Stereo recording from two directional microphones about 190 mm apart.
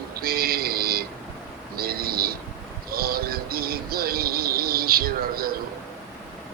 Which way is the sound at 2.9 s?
50° right (ahead or behind).